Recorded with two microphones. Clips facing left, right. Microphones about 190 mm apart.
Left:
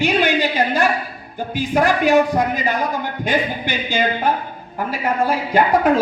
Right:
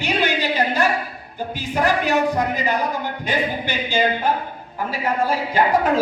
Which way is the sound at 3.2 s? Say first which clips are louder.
Left 3 dB; 55° left (ahead or behind).